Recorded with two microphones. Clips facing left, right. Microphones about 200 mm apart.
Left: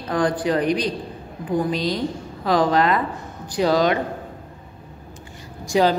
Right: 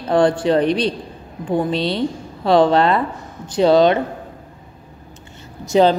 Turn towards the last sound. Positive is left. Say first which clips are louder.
# right 4 dB
turn(degrees=-25)  # may be behind; listen again after turning